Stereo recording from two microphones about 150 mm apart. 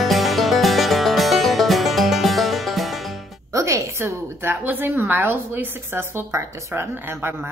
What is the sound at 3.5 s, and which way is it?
A woman's voice, 20° right (ahead or behind).